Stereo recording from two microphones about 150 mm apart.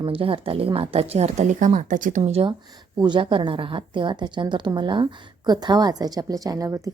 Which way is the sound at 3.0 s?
30° right (ahead or behind).